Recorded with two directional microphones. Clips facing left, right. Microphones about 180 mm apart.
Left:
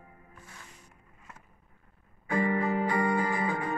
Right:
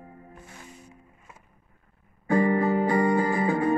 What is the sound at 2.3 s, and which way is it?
Music, 35° right (ahead or behind).